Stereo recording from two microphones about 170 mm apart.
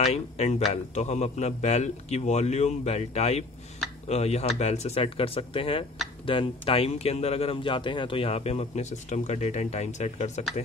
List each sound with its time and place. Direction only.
0.0 s speech: 40° left (ahead or behind)